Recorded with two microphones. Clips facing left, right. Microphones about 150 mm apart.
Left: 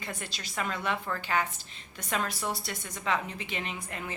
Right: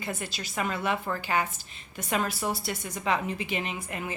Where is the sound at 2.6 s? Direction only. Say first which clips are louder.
Right 4 dB; 10° right (ahead or behind).